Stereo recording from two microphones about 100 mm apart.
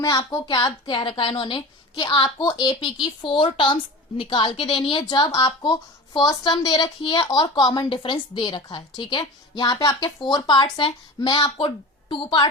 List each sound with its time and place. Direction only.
0.3 s a woman's voice: 45° left (ahead or behind)
2.4 s a woman's voice: 45° left (ahead or behind)